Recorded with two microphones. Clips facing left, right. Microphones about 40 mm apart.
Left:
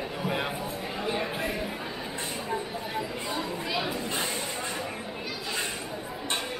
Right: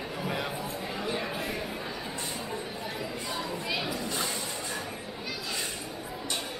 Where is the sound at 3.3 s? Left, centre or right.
Centre.